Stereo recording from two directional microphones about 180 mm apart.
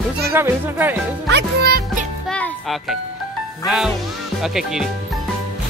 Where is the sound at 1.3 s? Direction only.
60° right (ahead or behind).